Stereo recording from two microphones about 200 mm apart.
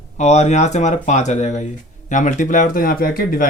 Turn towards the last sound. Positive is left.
turn(degrees=45)  # may be behind; listen again after turning